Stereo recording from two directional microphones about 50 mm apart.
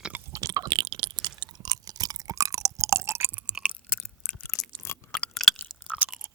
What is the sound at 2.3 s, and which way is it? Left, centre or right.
Chewing, right.